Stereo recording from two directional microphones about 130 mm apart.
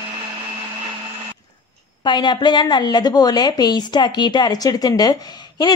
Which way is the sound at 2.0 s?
35° left (ahead or behind).